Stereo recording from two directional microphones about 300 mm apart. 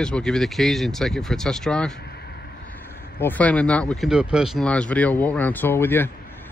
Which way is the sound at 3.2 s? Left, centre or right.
Centre.